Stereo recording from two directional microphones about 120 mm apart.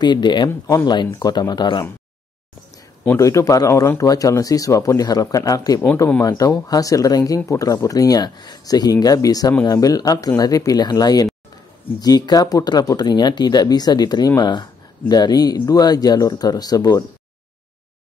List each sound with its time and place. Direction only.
0.0 s speech: 40° left (ahead or behind)
0.5 s speech: 25° left (ahead or behind)
0.8 s speech: 35° left (ahead or behind)
3.2 s speech: 25° left (ahead or behind)